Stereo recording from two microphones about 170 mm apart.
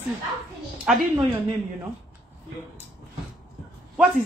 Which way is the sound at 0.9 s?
5° right (ahead or behind).